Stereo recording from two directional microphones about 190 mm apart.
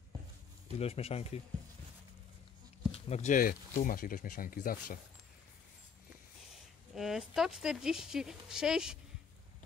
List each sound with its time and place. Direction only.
0.7 s speech: 30° left (ahead or behind)
2.9 s speech: 35° left (ahead or behind)
7.0 s speech: centre (ahead or behind)